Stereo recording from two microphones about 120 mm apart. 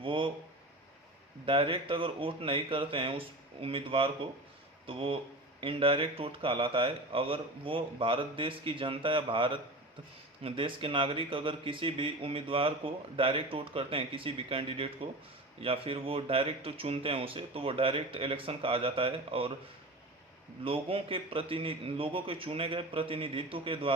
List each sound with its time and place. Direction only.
0.0 s a sound: 45° right (ahead or behind)
1.5 s speech: 45° right (ahead or behind)
20.7 s speech: 50° right (ahead or behind)